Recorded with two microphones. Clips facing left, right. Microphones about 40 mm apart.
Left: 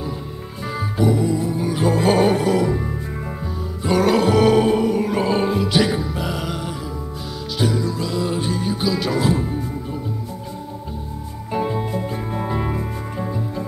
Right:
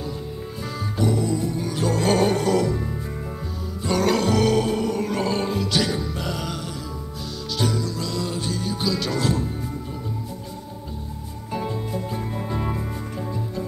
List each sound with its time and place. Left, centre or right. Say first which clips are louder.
0.7 s music: left 4 dB; centre
11.5 s music: left 5 dB; left